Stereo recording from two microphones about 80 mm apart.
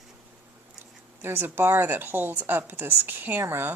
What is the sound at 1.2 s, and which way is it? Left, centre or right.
Speech, right.